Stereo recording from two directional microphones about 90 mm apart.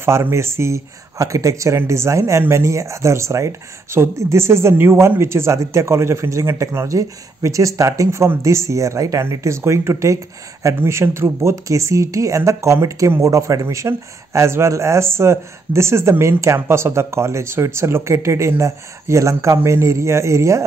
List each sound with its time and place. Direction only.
0.0 s speech: 30° right (ahead or behind)